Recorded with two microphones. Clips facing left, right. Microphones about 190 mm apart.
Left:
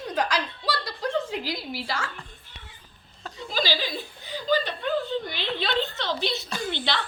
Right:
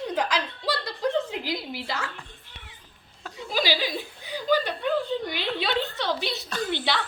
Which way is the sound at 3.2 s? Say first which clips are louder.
Right 1 dB; 10° right (ahead or behind).